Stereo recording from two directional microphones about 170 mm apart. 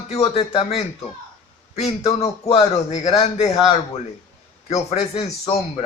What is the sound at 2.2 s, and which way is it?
Speech, 35° left (ahead or behind).